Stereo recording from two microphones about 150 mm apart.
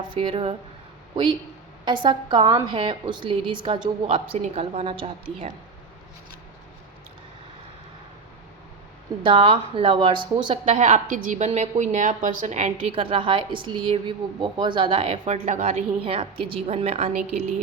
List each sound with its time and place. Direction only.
0.1 s a woman's voice: 35° right (ahead or behind)
4.4 s a woman's voice: 50° right (ahead or behind)
9.2 s a woman's voice: 35° right (ahead or behind)
10.8 s a woman's voice: 60° right (ahead or behind)
12.7 s a woman's voice: 35° right (ahead or behind)